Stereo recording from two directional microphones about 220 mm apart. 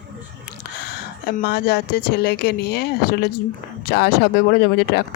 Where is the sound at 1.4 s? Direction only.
50° left (ahead or behind).